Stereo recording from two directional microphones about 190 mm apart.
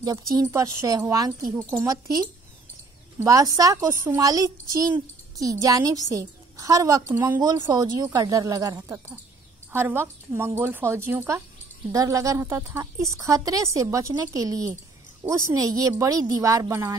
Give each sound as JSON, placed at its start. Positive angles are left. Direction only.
{"t": 0.0, "sound": "a child's voice", "side_deg": -20}
{"t": 7.3, "sound": "a child's voice", "side_deg": -20}